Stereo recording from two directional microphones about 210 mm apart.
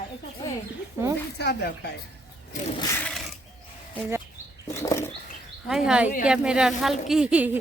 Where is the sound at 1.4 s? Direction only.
50° left (ahead or behind).